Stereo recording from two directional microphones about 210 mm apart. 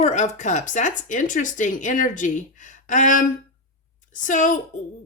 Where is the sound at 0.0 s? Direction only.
35° left (ahead or behind).